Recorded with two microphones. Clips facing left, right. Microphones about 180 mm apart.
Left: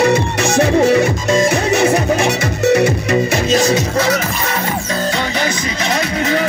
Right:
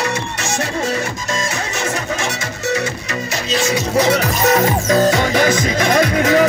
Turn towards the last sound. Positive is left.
turn(degrees=-45)  # may be behind; listen again after turning